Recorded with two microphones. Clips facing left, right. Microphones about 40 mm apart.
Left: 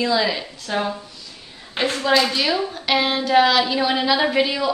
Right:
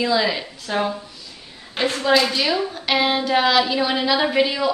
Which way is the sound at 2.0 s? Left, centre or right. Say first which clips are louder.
Right 1 dB; centre.